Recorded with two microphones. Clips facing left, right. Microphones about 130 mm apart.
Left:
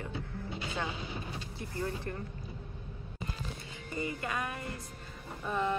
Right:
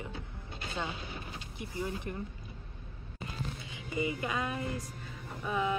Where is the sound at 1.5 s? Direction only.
15° right (ahead or behind).